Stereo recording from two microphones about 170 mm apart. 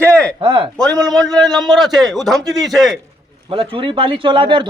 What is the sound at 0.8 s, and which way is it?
A man's voice, 5° left (ahead or behind).